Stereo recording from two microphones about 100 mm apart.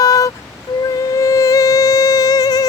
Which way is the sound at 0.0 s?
35° left (ahead or behind).